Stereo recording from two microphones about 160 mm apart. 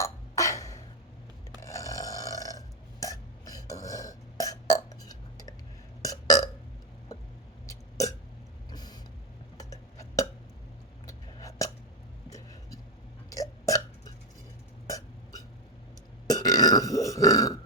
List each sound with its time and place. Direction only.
0.0 s a sound: 20° left (ahead or behind)
1.6 s burping: 20° left (ahead or behind)
7.7 s burping: 20° left (ahead or behind)
8.7 s vehicle: 25° left (ahead or behind)
9.6 s clock: 20° left (ahead or behind)
11.0 s a sound: 20° left (ahead or behind)
13.3 s burping: 20° left (ahead or behind)